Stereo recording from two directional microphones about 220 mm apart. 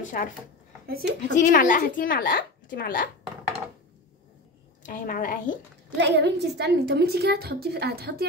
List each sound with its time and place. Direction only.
0.2 s a child's voice: 40° left (ahead or behind)
4.8 s a child's voice: 40° left (ahead or behind)
5.9 s a woman's voice: 50° right (ahead or behind)